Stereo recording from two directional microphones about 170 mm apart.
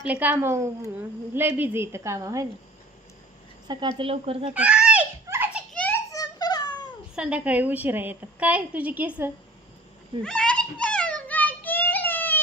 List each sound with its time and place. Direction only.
0.1 s a woman's voice: 10° right (ahead or behind)
3.7 s speech: 25° right (ahead or behind)
4.5 s giggle: 5° right (ahead or behind)
5.7 s a sound: 10° left (ahead or behind)
7.2 s a woman's voice: 5° right (ahead or behind)
10.2 s a sound: 5° left (ahead or behind)